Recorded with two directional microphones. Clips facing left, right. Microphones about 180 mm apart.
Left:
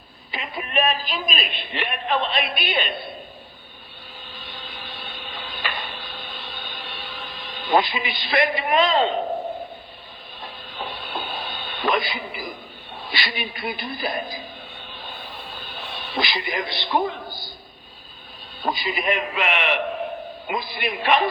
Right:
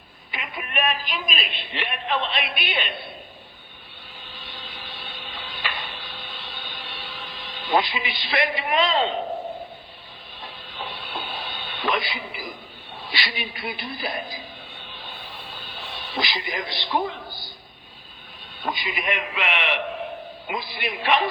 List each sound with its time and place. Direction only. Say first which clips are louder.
0.3 s a woman's voice: left 3 dB; 30° left (ahead or behind)
4.4 s a sound: left 2 dB; 50° left (ahead or behind)
10.4 s music: left 2 dB; 45° left (ahead or behind)
13.1 s speech: left 2 dB; 50° left (ahead or behind)
14.9 s music: left 3 dB; 45° left (ahead or behind)
18.6 s a woman's voice: left 4 dB; 35° left (ahead or behind)